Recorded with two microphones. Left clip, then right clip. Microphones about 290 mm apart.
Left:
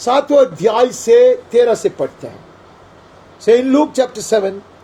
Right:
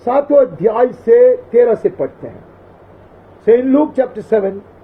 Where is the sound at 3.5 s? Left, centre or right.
Left.